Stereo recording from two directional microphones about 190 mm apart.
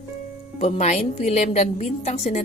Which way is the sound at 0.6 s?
35° left (ahead or behind).